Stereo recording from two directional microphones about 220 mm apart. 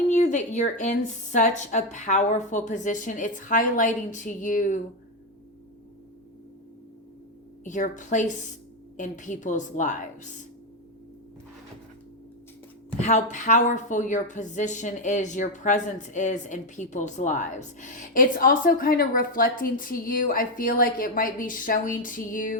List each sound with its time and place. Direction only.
0.1 s a woman's voice: 35° left (ahead or behind)
7.6 s a woman's voice: 35° left (ahead or behind)
13.0 s a woman's voice: 30° left (ahead or behind)